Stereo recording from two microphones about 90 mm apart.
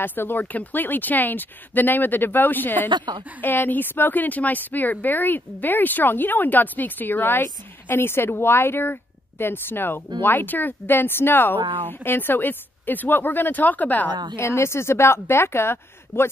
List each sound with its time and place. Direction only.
0.0 s speech: 25° left (ahead or behind)
11.6 s speech: 70° right (ahead or behind)
12.0 s speech: 25° left (ahead or behind)
14.3 s speech: 30° left (ahead or behind)